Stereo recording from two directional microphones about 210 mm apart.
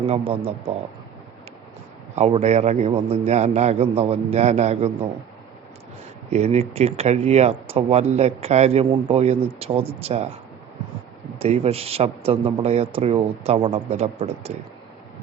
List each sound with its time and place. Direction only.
0.1 s speech: 30° right (ahead or behind)
2.1 s a man's voice: 30° right (ahead or behind)
6.3 s speech: 30° right (ahead or behind)
11.3 s speech: 30° right (ahead or behind)